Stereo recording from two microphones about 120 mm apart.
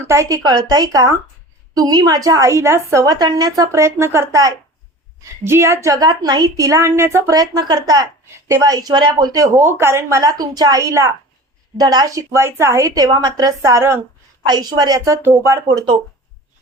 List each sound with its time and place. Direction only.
0.0 s a woman's voice: 25° right (ahead or behind)
14.4 s speech: 35° right (ahead or behind)